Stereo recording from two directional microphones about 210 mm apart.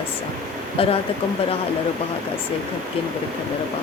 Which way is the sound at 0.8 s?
25° left (ahead or behind).